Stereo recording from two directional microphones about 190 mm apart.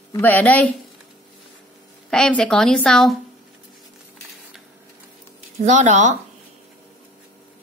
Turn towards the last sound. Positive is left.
turn(degrees=-40)  # may be behind; listen again after turning